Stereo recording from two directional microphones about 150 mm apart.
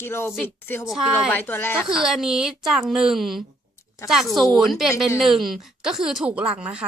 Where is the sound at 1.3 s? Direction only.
10° left (ahead or behind).